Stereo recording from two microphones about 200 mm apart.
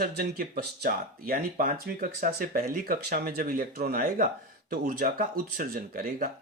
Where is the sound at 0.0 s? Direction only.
50° right (ahead or behind).